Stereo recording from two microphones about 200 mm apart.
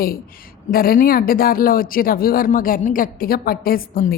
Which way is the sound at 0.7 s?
45° left (ahead or behind).